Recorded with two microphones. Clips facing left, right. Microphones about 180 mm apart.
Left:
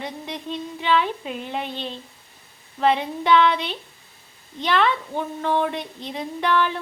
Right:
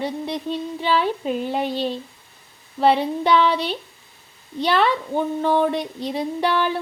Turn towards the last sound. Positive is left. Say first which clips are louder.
# right 1 dB
turn(degrees=-35)  # may be behind; listen again after turning